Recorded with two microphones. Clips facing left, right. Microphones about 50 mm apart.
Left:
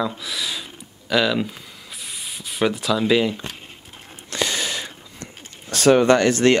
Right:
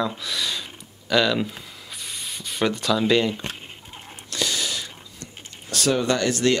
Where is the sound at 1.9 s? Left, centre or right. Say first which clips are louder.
Even; centre.